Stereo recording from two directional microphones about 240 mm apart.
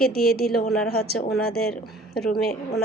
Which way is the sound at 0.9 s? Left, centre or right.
Left.